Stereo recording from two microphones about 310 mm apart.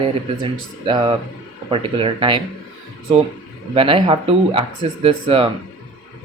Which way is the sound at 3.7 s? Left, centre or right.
Centre.